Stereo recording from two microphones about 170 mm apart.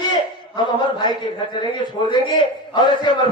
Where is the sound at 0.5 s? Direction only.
25° left (ahead or behind).